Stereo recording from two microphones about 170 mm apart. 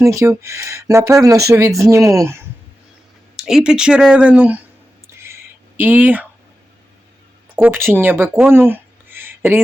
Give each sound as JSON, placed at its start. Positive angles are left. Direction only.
{"t": 0.0, "sound": "speech", "side_deg": -15}
{"t": 3.3, "sound": "a sound", "side_deg": -5}
{"t": 7.5, "sound": "speech", "side_deg": -10}